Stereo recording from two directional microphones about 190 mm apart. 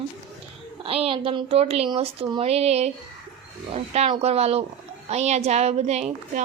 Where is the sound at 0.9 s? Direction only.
30° right (ahead or behind).